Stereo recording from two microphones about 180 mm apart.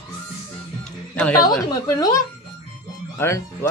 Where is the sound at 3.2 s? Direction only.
15° left (ahead or behind).